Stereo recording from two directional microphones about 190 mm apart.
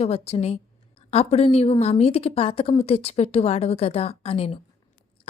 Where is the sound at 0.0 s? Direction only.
35° left (ahead or behind).